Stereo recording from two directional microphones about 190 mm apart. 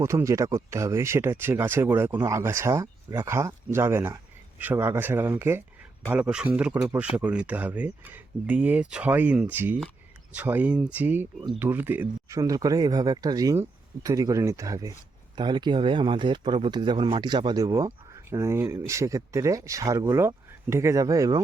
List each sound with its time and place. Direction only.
0.0 s speech: 15° right (ahead or behind)